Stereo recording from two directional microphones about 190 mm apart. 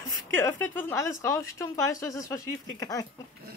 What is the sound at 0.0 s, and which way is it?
Speech, 10° left (ahead or behind).